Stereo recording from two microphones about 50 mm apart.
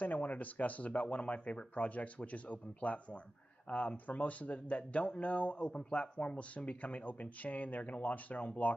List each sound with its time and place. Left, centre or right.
0.0 s speech: left